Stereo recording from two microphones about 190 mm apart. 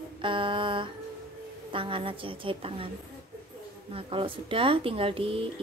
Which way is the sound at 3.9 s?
30° right (ahead or behind).